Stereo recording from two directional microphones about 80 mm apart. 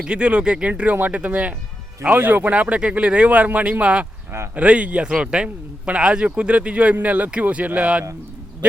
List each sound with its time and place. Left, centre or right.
0.0 s a man's voice: centre